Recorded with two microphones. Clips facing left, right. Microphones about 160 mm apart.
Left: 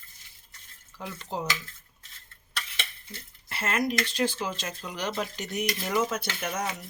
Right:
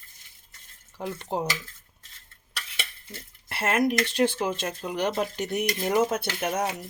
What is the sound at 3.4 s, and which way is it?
Speech, 65° right (ahead or behind).